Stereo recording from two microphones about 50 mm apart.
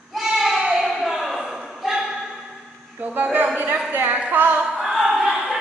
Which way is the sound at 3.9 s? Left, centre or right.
Right.